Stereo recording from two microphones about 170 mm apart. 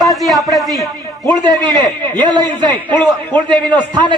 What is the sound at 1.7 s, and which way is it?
A man's voice, 25° right (ahead or behind).